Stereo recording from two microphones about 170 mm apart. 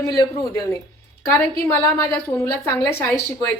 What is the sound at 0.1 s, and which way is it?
Speech, 20° left (ahead or behind).